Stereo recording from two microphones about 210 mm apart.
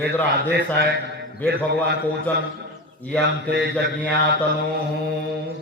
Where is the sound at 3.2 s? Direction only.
55° right (ahead or behind).